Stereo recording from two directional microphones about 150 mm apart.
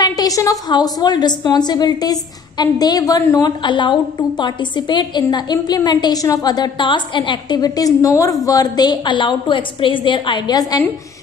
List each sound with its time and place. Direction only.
0.0 s a woman's voice: 25° left (ahead or behind)